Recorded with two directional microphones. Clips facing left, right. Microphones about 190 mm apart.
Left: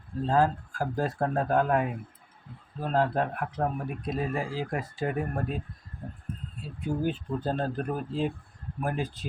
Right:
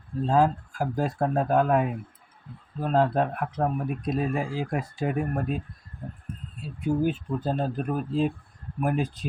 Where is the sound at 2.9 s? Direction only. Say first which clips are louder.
Right 3 dB; 20° right (ahead or behind).